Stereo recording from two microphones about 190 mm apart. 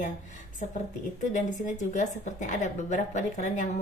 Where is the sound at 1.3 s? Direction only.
40° left (ahead or behind).